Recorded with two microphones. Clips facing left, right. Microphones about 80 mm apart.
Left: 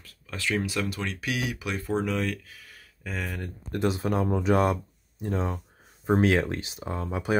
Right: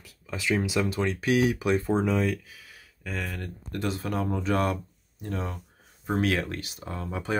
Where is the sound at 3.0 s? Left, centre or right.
Centre.